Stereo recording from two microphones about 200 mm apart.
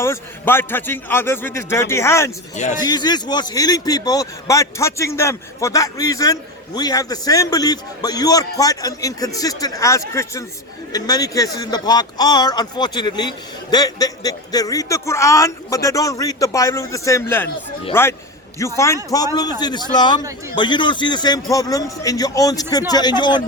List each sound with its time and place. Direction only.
0.0 s a man's voice: 10° left (ahead or behind)